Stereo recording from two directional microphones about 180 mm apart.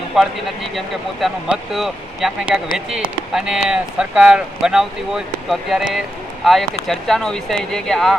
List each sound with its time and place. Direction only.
0.1 s speech: centre (ahead or behind)